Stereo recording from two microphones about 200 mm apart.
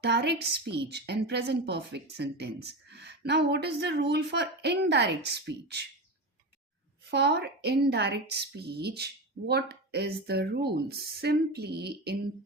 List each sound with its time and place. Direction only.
0.0 s a woman's voice: 55° right (ahead or behind)
7.0 s a woman's voice: 55° right (ahead or behind)